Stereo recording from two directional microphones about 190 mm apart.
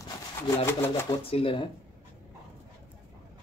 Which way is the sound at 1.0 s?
30° left (ahead or behind).